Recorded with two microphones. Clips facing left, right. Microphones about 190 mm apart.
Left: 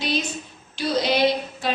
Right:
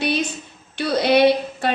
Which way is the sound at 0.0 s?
60° right (ahead or behind).